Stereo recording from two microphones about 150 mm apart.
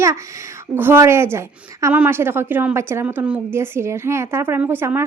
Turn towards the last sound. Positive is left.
turn(degrees=-15)  # may be behind; listen again after turning